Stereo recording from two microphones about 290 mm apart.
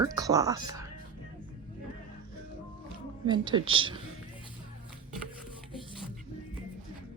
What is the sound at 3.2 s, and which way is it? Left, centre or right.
Speech, centre.